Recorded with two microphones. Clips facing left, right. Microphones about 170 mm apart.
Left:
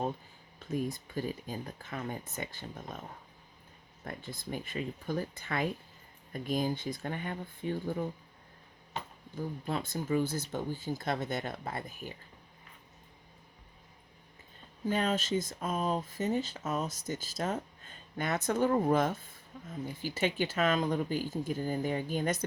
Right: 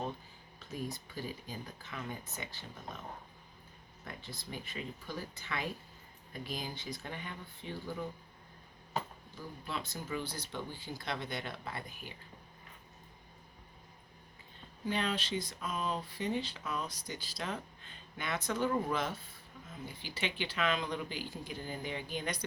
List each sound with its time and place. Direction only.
0.7 s speech: 50° left (ahead or behind)
4.0 s speech: 50° left (ahead or behind)
9.3 s speech: 50° left (ahead or behind)
14.8 s speech: 45° left (ahead or behind)